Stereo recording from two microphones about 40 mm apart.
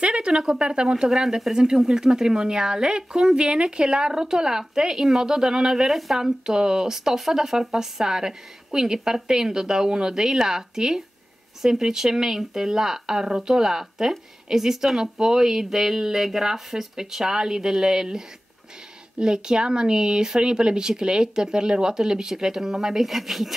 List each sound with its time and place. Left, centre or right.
0.0 s speech: right
5.9 s speech: centre